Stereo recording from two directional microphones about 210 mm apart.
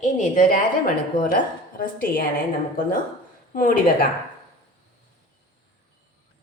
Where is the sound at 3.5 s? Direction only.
40° left (ahead or behind).